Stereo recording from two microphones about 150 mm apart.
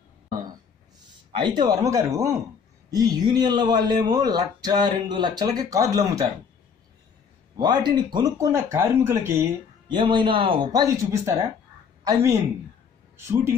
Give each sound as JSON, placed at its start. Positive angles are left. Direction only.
{"t": 1.4, "sound": "speech", "side_deg": -30}
{"t": 7.5, "sound": "speech", "side_deg": -30}
{"t": 9.8, "sound": "a man's voice", "side_deg": -30}